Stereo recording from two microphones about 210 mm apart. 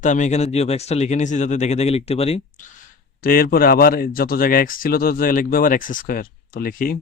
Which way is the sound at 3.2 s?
45° left (ahead or behind).